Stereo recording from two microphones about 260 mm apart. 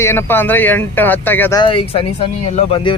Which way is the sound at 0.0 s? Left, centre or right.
Centre.